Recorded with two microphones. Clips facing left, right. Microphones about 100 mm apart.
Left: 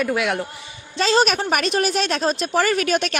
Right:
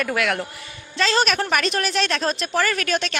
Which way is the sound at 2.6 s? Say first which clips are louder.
Left 4 dB; 45° right (ahead or behind).